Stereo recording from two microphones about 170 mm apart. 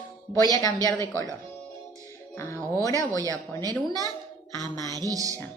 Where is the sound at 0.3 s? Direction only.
20° left (ahead or behind).